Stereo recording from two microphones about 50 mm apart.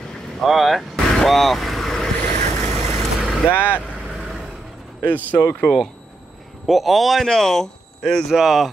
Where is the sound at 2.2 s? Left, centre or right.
Left.